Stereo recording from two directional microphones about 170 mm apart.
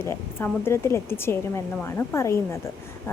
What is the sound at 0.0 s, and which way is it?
A woman's voice, 15° left (ahead or behind).